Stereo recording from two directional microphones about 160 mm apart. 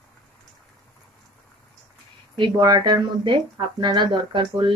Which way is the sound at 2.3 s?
30° right (ahead or behind).